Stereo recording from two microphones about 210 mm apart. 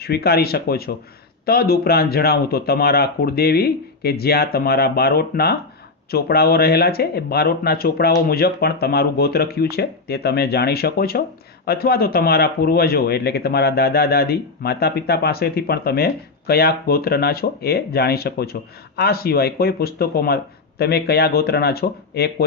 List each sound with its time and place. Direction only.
0.0 s speech: 50° left (ahead or behind)